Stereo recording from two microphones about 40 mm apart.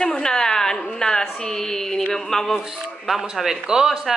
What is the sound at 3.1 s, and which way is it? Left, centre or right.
Speech, centre.